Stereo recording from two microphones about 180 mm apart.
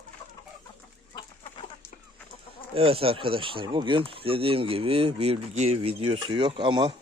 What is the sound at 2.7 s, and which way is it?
Speech, 30° right (ahead or behind).